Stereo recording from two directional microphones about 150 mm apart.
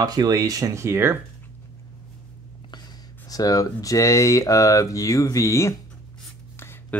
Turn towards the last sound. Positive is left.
turn(degrees=15)  # may be behind; listen again after turning